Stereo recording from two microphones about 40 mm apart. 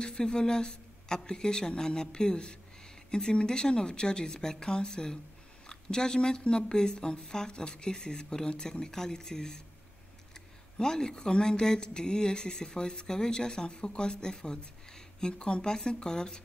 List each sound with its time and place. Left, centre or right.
0.0 s speech: centre